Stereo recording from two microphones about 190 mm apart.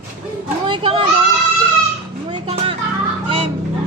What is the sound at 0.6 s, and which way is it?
Speech, 25° right (ahead or behind).